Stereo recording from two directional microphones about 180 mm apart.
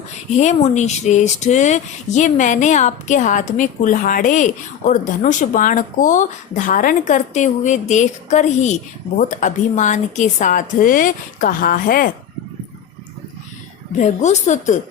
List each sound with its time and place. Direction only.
0.3 s speech: 40° left (ahead or behind)
14.0 s a woman's voice: 40° left (ahead or behind)